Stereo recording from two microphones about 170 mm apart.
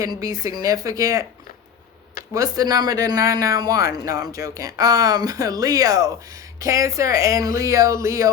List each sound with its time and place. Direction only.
0.0 s speech: 20° right (ahead or behind)
2.3 s speech: 20° right (ahead or behind)